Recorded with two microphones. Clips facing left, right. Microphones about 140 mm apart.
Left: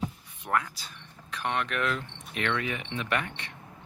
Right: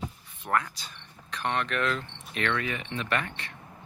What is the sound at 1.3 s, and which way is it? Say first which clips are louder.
Speech: right 1 dB; 10° left (ahead or behind).